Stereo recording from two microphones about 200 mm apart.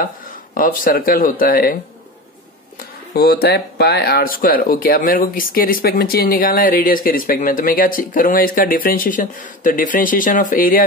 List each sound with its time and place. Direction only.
0.6 s speech: 45° left (ahead or behind)
3.2 s speech: 55° left (ahead or behind)